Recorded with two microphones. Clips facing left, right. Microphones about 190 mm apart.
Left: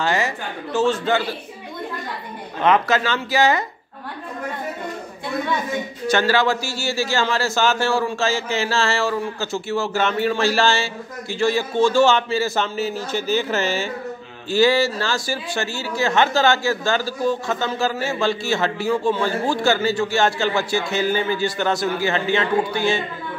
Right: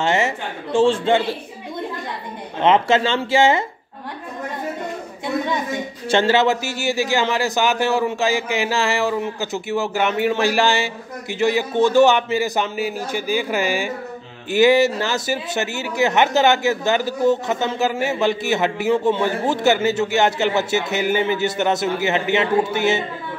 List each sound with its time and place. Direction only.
0.0 s speech: 25° right (ahead or behind)
2.6 s speech: 25° right (ahead or behind)
6.0 s speech: 25° right (ahead or behind)